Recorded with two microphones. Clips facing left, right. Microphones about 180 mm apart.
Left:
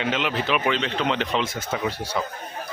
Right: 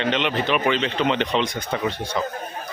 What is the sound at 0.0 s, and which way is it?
Speech, 5° left (ahead or behind).